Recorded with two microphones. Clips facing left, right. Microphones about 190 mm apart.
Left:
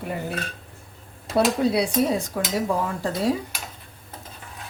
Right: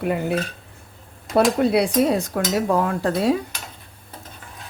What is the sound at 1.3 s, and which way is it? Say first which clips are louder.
Speech: right 3 dB; 60° right (ahead or behind).